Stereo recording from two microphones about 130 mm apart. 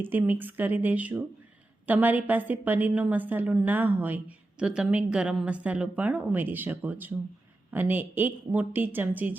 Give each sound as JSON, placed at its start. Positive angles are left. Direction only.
{"t": 0.0, "sound": "a woman's voice", "side_deg": -15}